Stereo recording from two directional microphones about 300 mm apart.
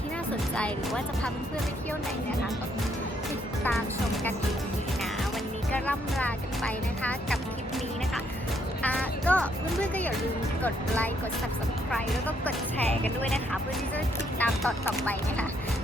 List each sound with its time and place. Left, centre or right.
0.5 s speech: centre
5.7 s speech: centre
8.8 s speech: centre
14.3 s speech: centre